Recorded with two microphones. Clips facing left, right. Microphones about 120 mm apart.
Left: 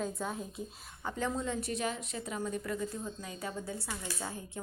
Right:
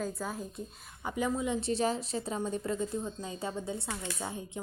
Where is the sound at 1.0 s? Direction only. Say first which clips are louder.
Right 3 dB; 10° right (ahead or behind).